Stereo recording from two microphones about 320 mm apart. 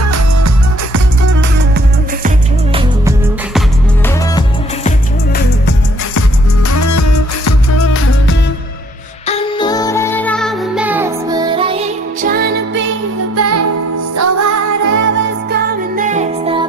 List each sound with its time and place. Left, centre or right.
0.0 s music: right
4.4 s music: left
6.7 s music: left
9.3 s music: centre; by 12.8 s right
13.4 s music: right
14.1 s music: right
15.5 s music: right